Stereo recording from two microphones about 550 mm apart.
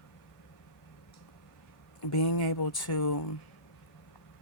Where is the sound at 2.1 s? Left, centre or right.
Left.